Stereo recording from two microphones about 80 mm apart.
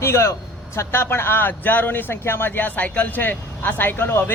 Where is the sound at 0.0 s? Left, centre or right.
Left.